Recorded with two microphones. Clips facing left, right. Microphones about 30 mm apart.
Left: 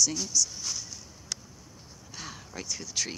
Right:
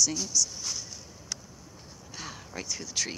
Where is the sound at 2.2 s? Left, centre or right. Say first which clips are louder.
Right 1 dB; centre.